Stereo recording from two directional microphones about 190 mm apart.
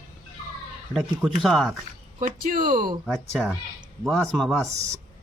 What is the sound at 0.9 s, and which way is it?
Speech, centre (ahead or behind).